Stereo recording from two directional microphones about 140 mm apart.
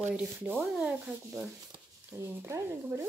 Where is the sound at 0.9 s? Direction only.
10° right (ahead or behind).